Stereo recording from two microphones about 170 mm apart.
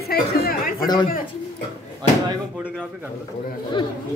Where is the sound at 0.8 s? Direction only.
25° left (ahead or behind).